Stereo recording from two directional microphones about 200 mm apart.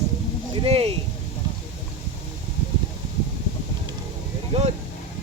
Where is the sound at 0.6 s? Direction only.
30° right (ahead or behind).